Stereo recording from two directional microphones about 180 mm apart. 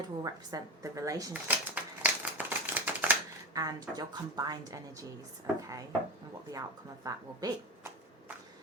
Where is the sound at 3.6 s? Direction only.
20° right (ahead or behind).